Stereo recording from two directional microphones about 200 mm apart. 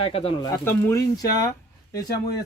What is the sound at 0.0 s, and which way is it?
Speech, 30° left (ahead or behind).